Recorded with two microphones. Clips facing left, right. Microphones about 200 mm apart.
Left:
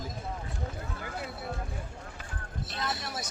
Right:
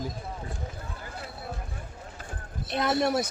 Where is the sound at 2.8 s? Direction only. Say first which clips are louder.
Right 12 dB; 60° right (ahead or behind).